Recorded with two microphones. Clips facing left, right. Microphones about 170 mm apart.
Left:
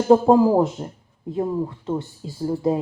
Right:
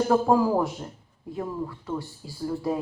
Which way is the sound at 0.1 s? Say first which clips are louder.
Left 9 dB; 25° left (ahead or behind).